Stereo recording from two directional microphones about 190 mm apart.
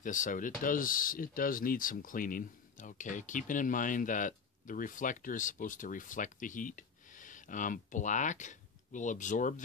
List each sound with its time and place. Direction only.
0.0 s speech: 45° left (ahead or behind)